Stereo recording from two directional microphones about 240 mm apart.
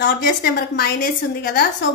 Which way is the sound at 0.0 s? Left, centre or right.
Left.